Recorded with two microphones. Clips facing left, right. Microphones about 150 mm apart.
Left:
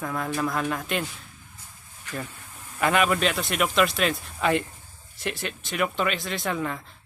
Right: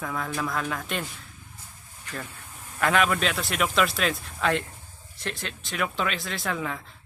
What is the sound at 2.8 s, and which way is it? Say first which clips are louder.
Speech: left 1 dB; 5° left (ahead or behind).